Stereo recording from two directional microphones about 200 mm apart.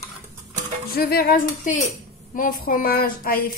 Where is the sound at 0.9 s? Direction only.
50° left (ahead or behind).